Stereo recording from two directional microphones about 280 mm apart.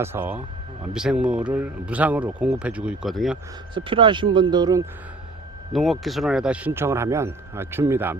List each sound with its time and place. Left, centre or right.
0.0 s speech: centre
3.8 s speech: centre
5.7 s speech: centre